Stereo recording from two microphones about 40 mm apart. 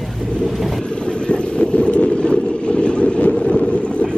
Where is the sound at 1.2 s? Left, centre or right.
Left.